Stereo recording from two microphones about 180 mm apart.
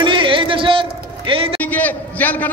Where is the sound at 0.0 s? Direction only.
30° right (ahead or behind).